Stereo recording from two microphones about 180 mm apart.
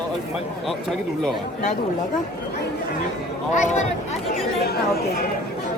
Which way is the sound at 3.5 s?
40° left (ahead or behind).